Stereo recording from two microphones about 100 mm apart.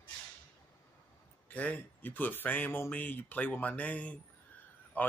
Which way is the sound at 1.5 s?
15° left (ahead or behind).